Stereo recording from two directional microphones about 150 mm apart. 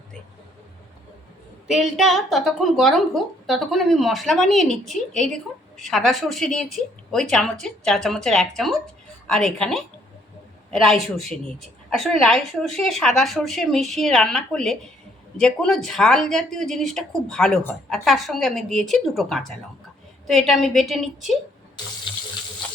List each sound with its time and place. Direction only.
1.6 s a woman's voice: centre (ahead or behind)
22.1 s water tap: 30° left (ahead or behind)